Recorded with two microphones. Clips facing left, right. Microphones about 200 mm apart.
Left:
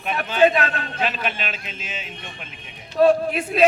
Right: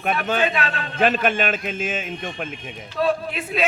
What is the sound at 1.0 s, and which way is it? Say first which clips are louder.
A man's voice: right 8 dB; 50° right (ahead or behind).